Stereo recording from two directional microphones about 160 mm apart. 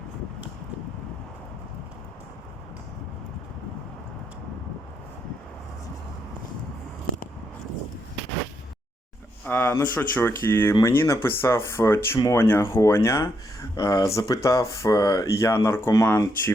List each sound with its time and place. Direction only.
9.5 s speech: 15° left (ahead or behind)